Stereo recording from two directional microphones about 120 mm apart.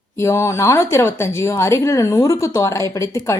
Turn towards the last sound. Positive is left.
turn(degrees=25)  # may be behind; listen again after turning